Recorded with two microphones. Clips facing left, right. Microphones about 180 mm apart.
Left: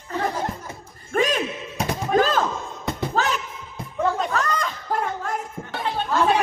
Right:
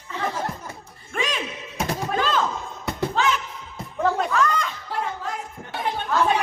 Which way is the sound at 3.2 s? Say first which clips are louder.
Right 1 dB; 40° left (ahead or behind).